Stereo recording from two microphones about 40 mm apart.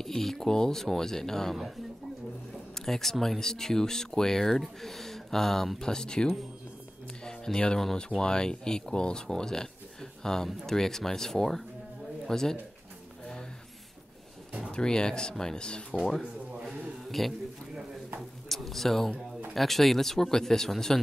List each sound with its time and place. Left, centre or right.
0.0 s speech: centre
2.7 s speech: centre
13.2 s music: centre
14.7 s speech: centre
16.6 s a sound: centre
18.5 s a sound: centre
19.5 s speech: centre